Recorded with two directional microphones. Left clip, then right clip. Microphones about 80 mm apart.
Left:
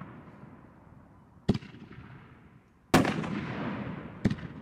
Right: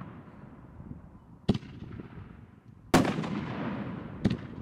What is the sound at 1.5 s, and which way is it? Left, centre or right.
Fireworks, centre.